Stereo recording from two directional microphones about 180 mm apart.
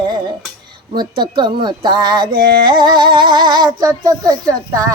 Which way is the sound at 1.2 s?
25° right (ahead or behind).